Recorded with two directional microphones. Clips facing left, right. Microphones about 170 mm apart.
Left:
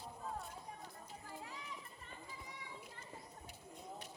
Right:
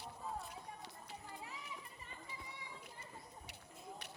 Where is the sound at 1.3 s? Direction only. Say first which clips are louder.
Left 3 dB; centre (ahead or behind).